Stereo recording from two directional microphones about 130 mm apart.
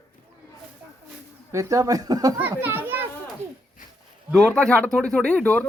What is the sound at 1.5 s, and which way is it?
Speech, 25° right (ahead or behind).